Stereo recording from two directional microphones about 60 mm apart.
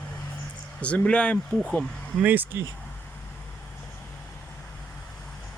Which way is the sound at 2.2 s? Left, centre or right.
Right.